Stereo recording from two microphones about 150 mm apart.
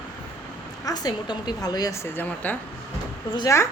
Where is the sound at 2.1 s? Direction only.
10° left (ahead or behind).